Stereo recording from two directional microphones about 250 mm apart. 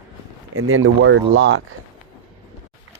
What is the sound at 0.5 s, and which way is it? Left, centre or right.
Speech, right.